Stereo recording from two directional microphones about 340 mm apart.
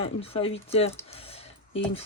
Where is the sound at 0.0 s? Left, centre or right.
Centre.